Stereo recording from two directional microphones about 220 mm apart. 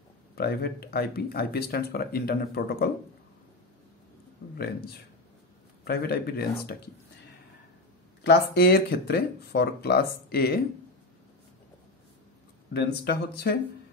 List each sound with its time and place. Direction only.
0.4 s speech: 45° left (ahead or behind)
5.9 s speech: 45° left (ahead or behind)
8.2 s speech: 45° left (ahead or behind)
12.7 s speech: 50° left (ahead or behind)